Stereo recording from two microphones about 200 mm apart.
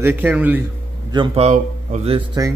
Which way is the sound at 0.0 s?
10° right (ahead or behind).